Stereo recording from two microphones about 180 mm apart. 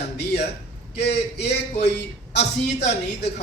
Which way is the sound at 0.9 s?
65° left (ahead or behind).